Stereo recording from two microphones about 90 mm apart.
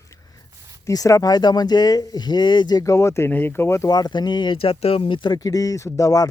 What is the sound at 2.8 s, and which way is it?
Speech, 35° left (ahead or behind).